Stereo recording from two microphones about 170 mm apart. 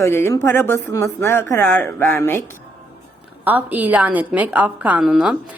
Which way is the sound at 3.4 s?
10° right (ahead or behind).